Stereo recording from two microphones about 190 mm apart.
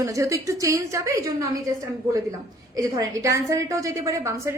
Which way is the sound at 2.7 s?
15° right (ahead or behind).